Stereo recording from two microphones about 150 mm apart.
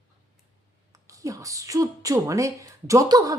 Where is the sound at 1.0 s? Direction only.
20° right (ahead or behind).